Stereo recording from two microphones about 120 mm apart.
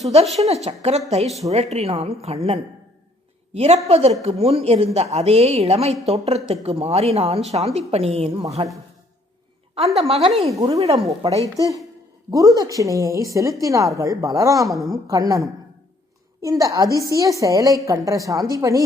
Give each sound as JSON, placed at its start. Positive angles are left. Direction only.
{"t": 0.0, "sound": "a woman's voice", "side_deg": -60}
{"t": 9.9, "sound": "a woman's voice", "side_deg": -60}
{"t": 11.2, "sound": "a woman's voice", "side_deg": -35}